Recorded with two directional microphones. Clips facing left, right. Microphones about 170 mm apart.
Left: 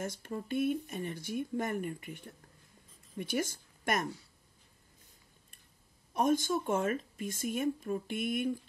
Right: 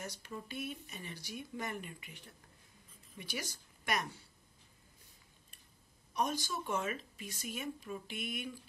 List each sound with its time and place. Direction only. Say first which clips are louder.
0.0 s speech: left 7 dB; 50° left (ahead or behind)
6.1 s speech: left 8 dB; 50° left (ahead or behind)